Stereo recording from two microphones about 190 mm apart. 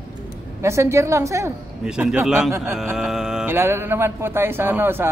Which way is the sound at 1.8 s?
5° right (ahead or behind).